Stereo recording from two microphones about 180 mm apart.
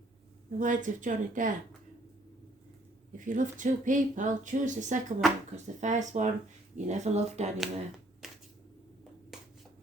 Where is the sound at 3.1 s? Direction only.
45° right (ahead or behind).